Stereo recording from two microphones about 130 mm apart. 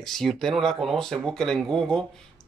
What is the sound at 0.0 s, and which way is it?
Speech, 5° left (ahead or behind).